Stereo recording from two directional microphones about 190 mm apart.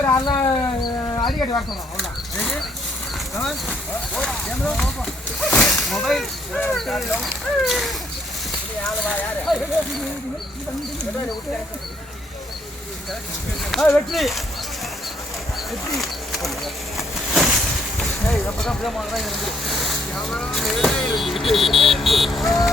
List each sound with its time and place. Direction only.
0.0 s a sound: 15° left (ahead or behind)
1.4 s speech: 20° left (ahead or behind)
2.0 s speech: centre (ahead or behind)
13.7 s speech: 5° left (ahead or behind)
16.0 s a sound: centre (ahead or behind)
18.6 s speech: centre (ahead or behind)